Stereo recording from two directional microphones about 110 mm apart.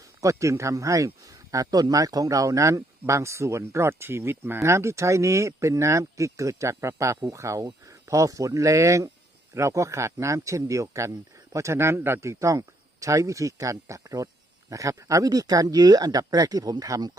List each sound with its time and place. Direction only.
0.2 s speech: 30° right (ahead or behind)